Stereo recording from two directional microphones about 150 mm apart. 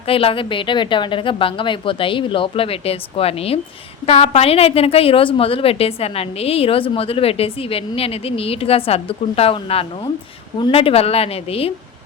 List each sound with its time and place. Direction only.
0.1 s a woman's voice: 40° left (ahead or behind)